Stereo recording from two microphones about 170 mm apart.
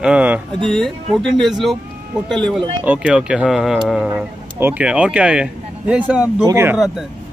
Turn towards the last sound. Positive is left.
turn(degrees=-15)  # may be behind; listen again after turning